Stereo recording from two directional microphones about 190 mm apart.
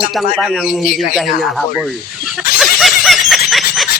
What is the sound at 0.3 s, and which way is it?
Speech, centre (ahead or behind).